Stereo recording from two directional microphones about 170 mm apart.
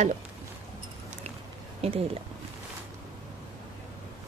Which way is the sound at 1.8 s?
35° right (ahead or behind).